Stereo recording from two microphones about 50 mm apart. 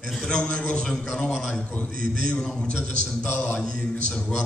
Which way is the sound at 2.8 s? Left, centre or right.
Left.